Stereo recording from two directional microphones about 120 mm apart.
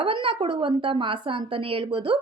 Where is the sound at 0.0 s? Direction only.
50° right (ahead or behind).